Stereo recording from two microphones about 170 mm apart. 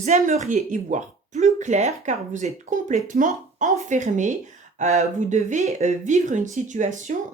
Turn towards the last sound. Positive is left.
turn(degrees=-45)  # may be behind; listen again after turning